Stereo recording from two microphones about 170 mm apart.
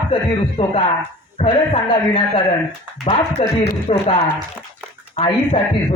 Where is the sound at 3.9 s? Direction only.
35° left (ahead or behind).